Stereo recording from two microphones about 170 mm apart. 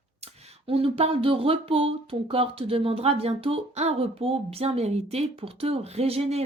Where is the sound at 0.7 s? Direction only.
35° right (ahead or behind).